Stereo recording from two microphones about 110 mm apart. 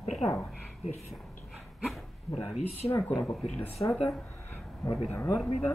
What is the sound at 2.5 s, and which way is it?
Speech, 75° left (ahead or behind).